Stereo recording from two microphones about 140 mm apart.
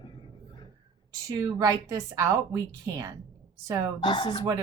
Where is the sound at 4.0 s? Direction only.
35° left (ahead or behind).